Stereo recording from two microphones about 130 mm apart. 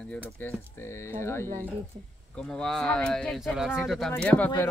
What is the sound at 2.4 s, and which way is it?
Speech, 5° left (ahead or behind).